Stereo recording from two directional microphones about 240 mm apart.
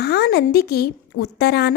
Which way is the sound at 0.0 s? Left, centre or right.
Left.